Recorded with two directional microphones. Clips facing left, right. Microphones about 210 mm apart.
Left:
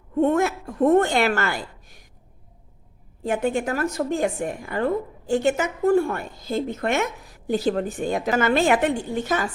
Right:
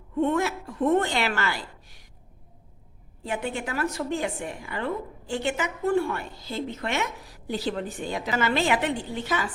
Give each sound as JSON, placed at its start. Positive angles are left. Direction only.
{"t": 0.2, "sound": "a woman's voice", "side_deg": 45}
{"t": 3.2, "sound": "a woman's voice", "side_deg": 45}